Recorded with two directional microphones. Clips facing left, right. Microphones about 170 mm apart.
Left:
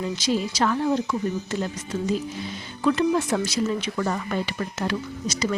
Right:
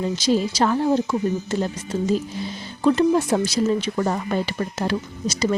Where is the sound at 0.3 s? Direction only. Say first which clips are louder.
Right 4 dB; 35° right (ahead or behind).